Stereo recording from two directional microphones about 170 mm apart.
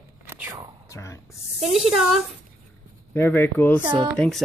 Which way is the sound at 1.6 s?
Centre (ahead or behind).